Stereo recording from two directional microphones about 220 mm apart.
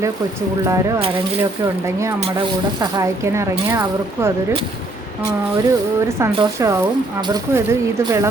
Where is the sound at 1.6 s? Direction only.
15° right (ahead or behind).